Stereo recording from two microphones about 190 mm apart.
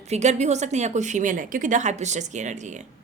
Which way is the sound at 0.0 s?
35° right (ahead or behind).